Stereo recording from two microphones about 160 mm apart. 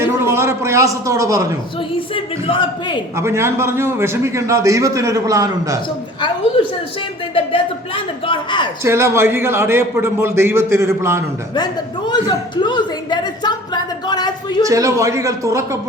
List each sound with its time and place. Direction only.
0.1 s a sound: 15° right (ahead or behind)
2.1 s a man's voice: 30° left (ahead or behind)
3.2 s a man's voice: 15° right (ahead or behind)
6.6 s a man's voice: 35° left (ahead or behind)
8.8 s a man's voice: 15° right (ahead or behind)
11.5 s a sound: 25° left (ahead or behind)
14.6 s a man's voice: 20° right (ahead or behind)